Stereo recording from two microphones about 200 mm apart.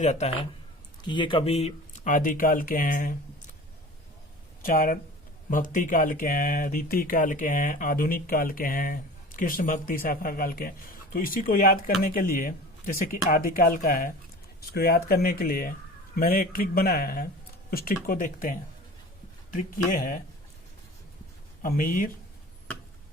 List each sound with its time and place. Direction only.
0.0 s speech: 35° left (ahead or behind)
4.6 s speech: 45° left (ahead or behind)
21.6 s speech: 45° left (ahead or behind)